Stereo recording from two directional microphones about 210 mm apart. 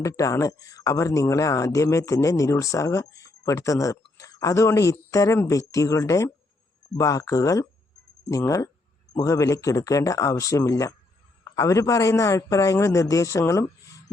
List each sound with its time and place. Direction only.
0.0 s speech: 15° left (ahead or behind)